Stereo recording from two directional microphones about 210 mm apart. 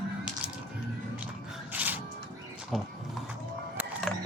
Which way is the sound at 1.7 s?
10° right (ahead or behind).